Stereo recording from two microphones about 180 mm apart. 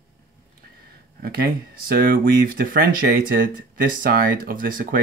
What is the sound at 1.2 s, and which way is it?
Speech, 55° right (ahead or behind).